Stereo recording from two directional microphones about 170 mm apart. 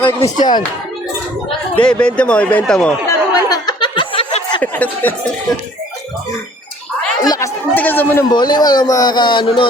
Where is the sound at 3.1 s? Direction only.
20° left (ahead or behind).